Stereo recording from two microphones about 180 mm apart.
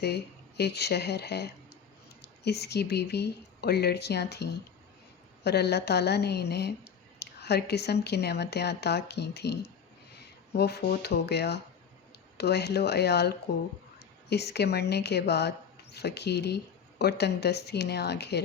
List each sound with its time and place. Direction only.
0.0 s a woman's voice: 65° left (ahead or behind)